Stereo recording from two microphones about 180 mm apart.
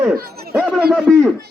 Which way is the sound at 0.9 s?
Centre (ahead or behind).